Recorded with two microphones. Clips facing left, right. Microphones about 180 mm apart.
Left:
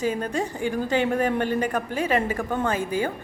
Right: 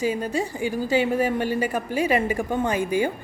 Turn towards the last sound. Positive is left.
turn(degrees=-15)  # may be behind; listen again after turning